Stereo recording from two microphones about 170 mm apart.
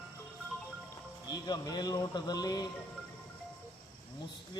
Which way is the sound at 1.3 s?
25° left (ahead or behind).